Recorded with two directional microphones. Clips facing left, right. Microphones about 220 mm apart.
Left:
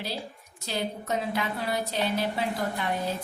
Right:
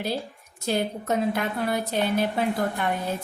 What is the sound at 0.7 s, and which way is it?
A woman's voice, 50° right (ahead or behind).